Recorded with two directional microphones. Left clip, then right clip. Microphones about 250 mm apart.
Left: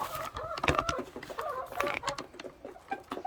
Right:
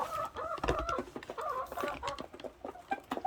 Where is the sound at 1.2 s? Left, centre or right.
Right.